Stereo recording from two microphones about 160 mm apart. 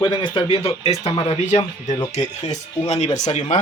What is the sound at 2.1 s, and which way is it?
Speech, 45° left (ahead or behind).